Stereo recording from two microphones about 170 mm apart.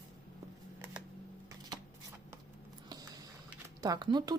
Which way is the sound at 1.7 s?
25° right (ahead or behind).